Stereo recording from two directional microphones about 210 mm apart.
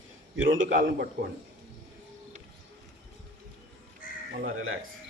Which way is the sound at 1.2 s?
45° right (ahead or behind).